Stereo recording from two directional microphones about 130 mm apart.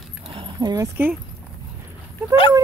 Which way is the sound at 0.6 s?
30° right (ahead or behind).